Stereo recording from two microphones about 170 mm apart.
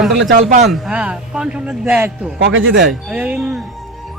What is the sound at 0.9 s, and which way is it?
Speech, 5° right (ahead or behind).